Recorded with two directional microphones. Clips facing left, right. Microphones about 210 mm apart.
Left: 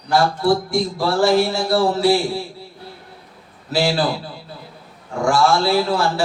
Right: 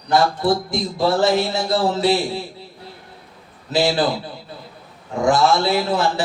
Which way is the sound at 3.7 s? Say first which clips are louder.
Right 1 dB; 20° right (ahead or behind).